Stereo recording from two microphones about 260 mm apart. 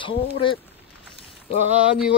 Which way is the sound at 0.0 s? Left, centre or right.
Centre.